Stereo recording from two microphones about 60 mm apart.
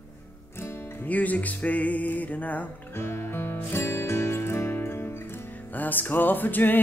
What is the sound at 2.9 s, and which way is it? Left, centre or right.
Music, left.